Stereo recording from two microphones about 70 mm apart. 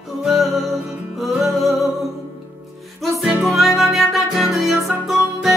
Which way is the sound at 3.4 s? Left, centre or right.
Centre.